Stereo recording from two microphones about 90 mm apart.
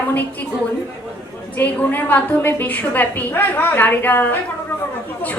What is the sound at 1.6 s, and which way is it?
A woman's voice, 20° left (ahead or behind).